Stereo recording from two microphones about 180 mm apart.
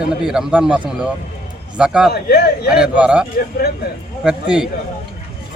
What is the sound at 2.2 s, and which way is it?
Speech, 60° left (ahead or behind).